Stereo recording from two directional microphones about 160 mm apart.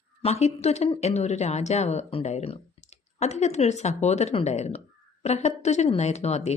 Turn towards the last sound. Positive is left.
turn(degrees=40)  # may be behind; listen again after turning